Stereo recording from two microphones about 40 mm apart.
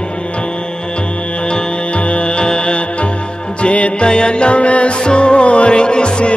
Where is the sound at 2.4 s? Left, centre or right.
Left.